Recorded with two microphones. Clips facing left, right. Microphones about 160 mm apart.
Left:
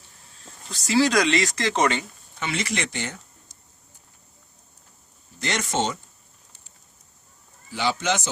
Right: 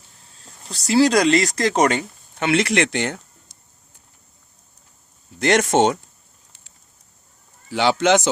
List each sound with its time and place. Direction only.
0.7 s speech: 35° right (ahead or behind)
2.5 s speech: 65° right (ahead or behind)
5.4 s speech: 55° right (ahead or behind)
7.7 s speech: 75° right (ahead or behind)